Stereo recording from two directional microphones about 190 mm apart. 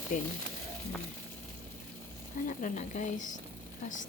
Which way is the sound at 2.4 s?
40° left (ahead or behind).